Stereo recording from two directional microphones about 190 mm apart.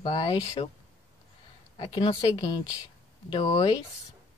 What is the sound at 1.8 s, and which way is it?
Speech, 25° left (ahead or behind).